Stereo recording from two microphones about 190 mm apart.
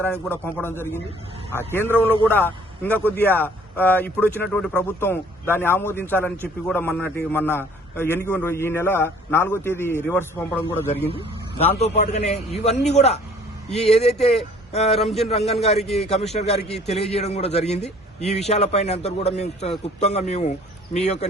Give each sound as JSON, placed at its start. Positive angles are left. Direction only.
{"t": 0.0, "sound": "a man's voice", "side_deg": 10}
{"t": 11.5, "sound": "a man's voice", "side_deg": 35}
{"t": 14.9, "sound": "speech", "side_deg": 0}
{"t": 15.3, "sound": "a man's voice", "side_deg": 35}